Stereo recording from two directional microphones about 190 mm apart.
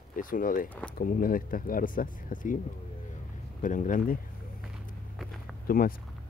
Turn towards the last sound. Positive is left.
turn(degrees=50)  # may be behind; listen again after turning